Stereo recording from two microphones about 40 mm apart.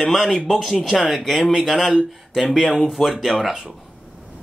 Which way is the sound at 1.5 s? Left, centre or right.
Centre.